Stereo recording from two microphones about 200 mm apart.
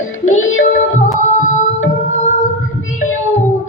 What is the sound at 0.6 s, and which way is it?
Music, 40° left (ahead or behind).